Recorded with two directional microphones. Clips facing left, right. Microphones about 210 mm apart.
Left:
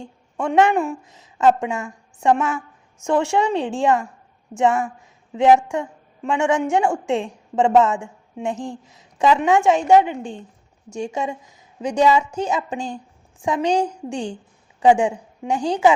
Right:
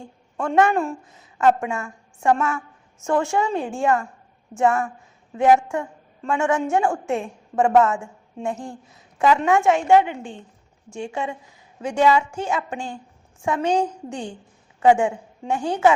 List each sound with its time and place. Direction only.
0.4 s a woman's voice: 15° left (ahead or behind)
10.8 s a woman's voice: 40° left (ahead or behind)
11.1 s a woman's voice: 20° left (ahead or behind)